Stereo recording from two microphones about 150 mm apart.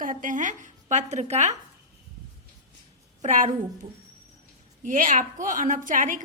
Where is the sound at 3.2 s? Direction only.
50° right (ahead or behind).